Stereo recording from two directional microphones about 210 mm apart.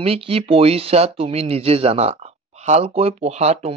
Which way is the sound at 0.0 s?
25° right (ahead or behind).